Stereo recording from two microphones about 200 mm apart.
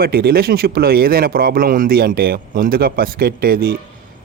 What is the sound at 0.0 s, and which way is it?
A man's voice, 50° right (ahead or behind).